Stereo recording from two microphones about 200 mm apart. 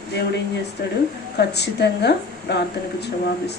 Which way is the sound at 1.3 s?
55° left (ahead or behind).